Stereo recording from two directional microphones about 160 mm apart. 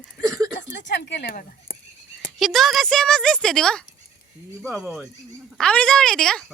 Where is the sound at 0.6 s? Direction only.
90° left; by 1.7 s 75° left (ahead or behind).